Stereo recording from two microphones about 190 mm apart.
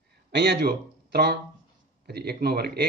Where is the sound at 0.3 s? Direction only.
65° right (ahead or behind).